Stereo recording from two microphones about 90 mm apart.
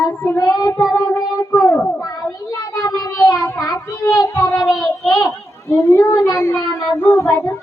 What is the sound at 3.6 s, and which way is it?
Child singing, 40° left (ahead or behind).